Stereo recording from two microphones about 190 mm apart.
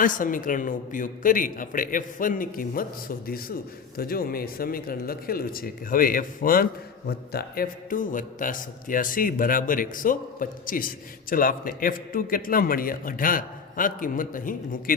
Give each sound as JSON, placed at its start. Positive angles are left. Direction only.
{"t": 0.0, "sound": "a man's voice", "side_deg": 45}